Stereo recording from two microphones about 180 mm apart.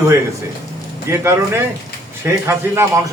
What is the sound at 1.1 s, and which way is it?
A man's voice, 15° right (ahead or behind).